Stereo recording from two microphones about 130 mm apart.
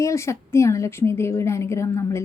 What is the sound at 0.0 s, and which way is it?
A woman's voice, 20° left (ahead or behind).